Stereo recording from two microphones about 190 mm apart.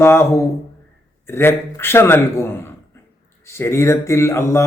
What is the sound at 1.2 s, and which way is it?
A man's voice, 10° left (ahead or behind).